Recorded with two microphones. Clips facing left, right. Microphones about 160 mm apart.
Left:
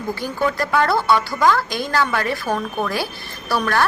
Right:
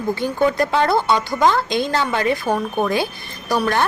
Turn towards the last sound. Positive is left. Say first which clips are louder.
# right 1 dB
turn(degrees=-20)  # may be behind; listen again after turning